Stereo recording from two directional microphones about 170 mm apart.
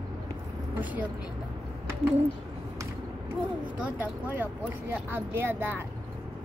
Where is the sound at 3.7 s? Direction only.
10° right (ahead or behind).